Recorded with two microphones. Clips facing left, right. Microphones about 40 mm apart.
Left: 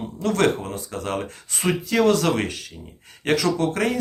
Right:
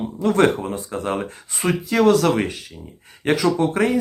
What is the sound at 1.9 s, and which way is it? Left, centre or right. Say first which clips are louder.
Speech: right 3 dB; centre.